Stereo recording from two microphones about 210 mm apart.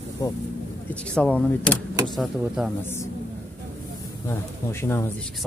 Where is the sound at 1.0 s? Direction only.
5° left (ahead or behind).